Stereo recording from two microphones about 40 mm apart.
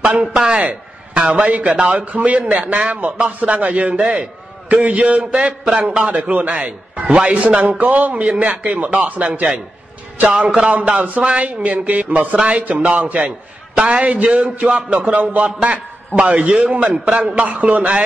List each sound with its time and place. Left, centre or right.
0.0 s a man's voice: right
1.8 s a man's voice: right
2.0 s a man's voice: right
10.7 s a man's voice: right
13.7 s a man's voice: right
14.0 s a man's voice: right